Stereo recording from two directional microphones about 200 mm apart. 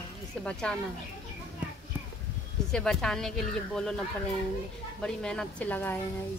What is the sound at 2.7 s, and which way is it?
Speech, 5° left (ahead or behind).